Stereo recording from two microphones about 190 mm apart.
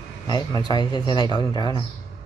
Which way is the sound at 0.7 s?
20° left (ahead or behind).